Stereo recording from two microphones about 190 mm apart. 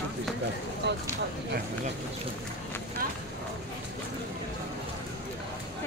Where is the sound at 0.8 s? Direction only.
65° right (ahead or behind).